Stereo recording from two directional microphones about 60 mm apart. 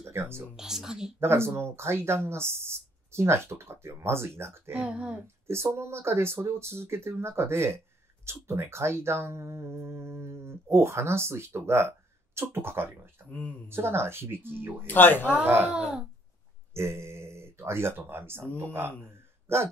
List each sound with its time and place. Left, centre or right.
0.0 s a sound: right
0.6 s speech: centre
1.2 s speech: right
4.7 s speech: centre
5.2 s speech: right
13.3 s speech: left
13.7 s speech: right
14.9 s speech: left
15.4 s speech: right
16.7 s speech: right